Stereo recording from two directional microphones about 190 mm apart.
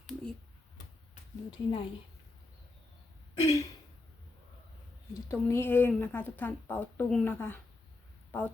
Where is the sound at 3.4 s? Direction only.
15° left (ahead or behind).